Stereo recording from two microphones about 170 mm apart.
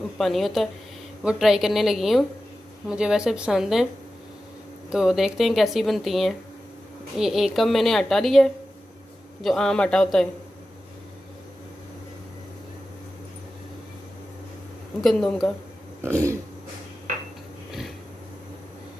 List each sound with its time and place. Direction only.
0.2 s speech: centre (ahead or behind)
4.8 s speech: 5° right (ahead or behind)
15.0 s speech: centre (ahead or behind)
16.0 s burping: 15° right (ahead or behind)
17.6 s a sound: centre (ahead or behind)